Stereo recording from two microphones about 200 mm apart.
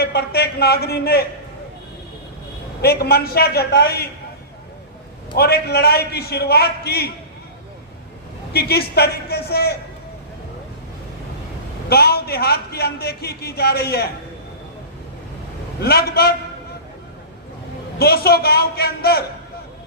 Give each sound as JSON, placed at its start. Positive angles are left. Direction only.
{"t": 0.0, "sound": "a man's voice", "side_deg": 55}
{"t": 2.8, "sound": "a man's voice", "side_deg": 50}
{"t": 5.4, "sound": "a man's voice", "side_deg": 55}
{"t": 8.5, "sound": "a man's voice", "side_deg": 55}
{"t": 11.9, "sound": "a man's voice", "side_deg": 50}
{"t": 15.8, "sound": "a man's voice", "side_deg": 50}
{"t": 18.0, "sound": "a man's voice", "side_deg": 50}